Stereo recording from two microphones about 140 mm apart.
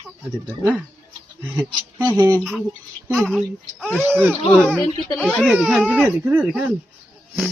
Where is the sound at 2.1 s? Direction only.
20° right (ahead or behind).